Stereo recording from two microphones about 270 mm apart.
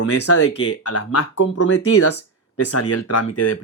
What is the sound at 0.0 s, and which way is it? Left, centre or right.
Speech, left.